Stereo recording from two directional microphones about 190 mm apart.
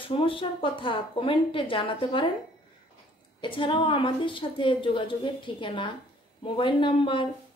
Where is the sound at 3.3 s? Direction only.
25° left (ahead or behind).